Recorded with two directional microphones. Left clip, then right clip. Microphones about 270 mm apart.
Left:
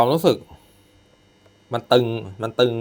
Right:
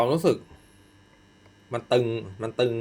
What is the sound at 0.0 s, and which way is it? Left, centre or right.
Speech, left.